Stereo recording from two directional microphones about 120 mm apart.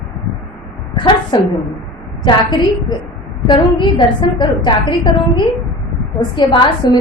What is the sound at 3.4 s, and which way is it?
A woman's voice, 40° left (ahead or behind).